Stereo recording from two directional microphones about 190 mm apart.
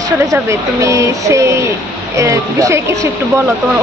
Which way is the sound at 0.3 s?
15° right (ahead or behind).